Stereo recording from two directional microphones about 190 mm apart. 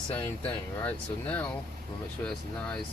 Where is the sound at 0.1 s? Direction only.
10° left (ahead or behind).